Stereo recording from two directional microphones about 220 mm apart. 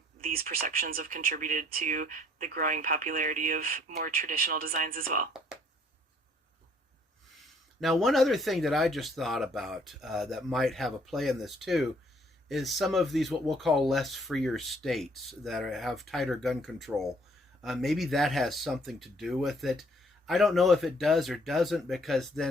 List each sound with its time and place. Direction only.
0.2 s speech: 40° right (ahead or behind)
7.4 s speech: centre (ahead or behind)